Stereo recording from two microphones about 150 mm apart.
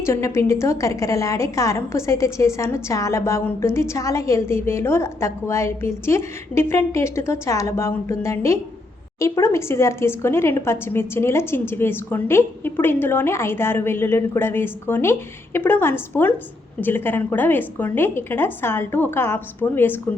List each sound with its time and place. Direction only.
0.0 s a woman's voice: 20° left (ahead or behind)